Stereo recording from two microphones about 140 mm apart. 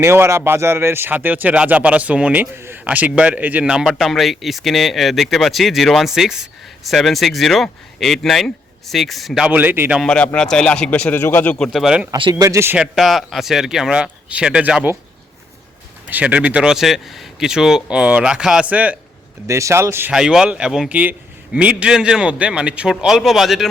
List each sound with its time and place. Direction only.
0.0 s speech: 20° right (ahead or behind); by 9.5 s centre (ahead or behind)
9.5 s a man's voice: 15° right (ahead or behind)
10.0 s a man's voice: 5° left (ahead or behind)
11.5 s speech: centre (ahead or behind)
12.1 s speech: 30° right (ahead or behind)
12.7 s speech: 5° right (ahead or behind)
16.0 s speech: 10° right (ahead or behind)
19.5 s speech: 20° right (ahead or behind)
20.1 s speech: 5° right (ahead or behind)